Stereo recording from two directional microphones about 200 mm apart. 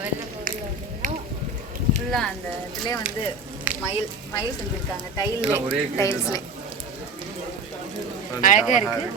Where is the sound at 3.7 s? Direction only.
5° right (ahead or behind).